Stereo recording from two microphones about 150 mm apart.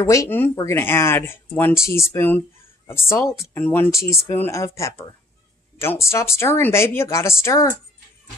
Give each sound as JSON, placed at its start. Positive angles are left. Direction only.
{"t": 0.0, "sound": "speech", "side_deg": 20}